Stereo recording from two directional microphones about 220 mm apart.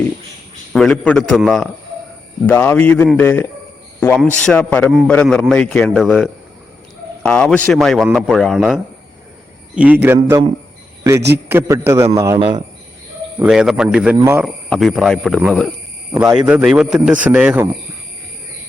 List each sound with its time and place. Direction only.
0.7 s a man's voice: 5° left (ahead or behind); by 12.6 s 20° right (ahead or behind)
13.4 s a man's voice: 5° right (ahead or behind)